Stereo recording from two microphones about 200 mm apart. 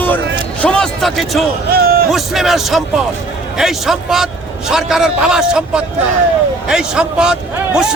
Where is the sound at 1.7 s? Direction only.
50° right (ahead or behind).